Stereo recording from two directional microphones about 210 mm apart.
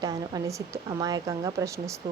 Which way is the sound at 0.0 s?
15° right (ahead or behind).